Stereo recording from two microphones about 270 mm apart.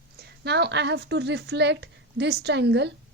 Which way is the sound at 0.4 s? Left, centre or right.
Right.